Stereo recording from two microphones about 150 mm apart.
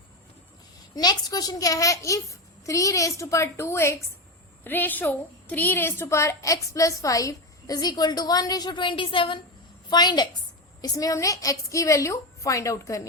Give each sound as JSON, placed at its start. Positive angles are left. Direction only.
{"t": 0.9, "sound": "a woman's voice", "side_deg": 25}